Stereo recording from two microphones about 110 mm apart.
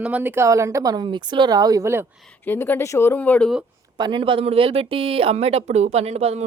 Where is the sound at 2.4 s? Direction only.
20° left (ahead or behind).